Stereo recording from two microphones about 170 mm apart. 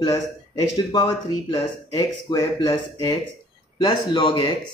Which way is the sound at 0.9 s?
25° left (ahead or behind).